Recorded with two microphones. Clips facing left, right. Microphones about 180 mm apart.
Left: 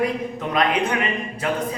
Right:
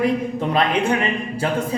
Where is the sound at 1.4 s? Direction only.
30° right (ahead or behind).